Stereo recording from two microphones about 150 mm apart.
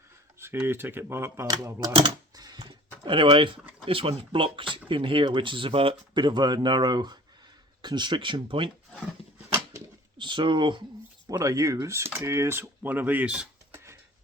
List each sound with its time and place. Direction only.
0.3 s speech: 15° right (ahead or behind)
1.5 s speech: 25° right (ahead or behind)
9.7 s pigeon: 30° right (ahead or behind)
11.3 s speech: 20° right (ahead or behind)